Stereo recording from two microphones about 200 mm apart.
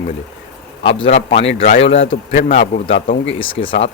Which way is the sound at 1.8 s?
70° left (ahead or behind).